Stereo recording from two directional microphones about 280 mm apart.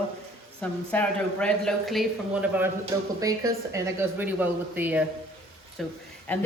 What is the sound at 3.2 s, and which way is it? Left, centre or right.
Speech, centre.